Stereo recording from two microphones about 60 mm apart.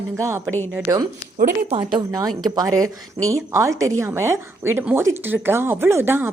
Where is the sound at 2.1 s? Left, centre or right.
Right.